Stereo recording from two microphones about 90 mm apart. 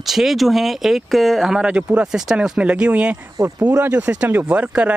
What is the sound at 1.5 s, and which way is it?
Speech, 15° right (ahead or behind).